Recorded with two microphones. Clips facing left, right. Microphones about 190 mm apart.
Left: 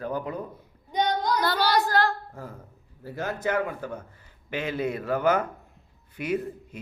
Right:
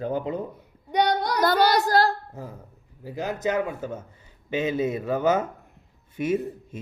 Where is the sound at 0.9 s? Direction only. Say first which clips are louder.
Right 2 dB; 70° right (ahead or behind).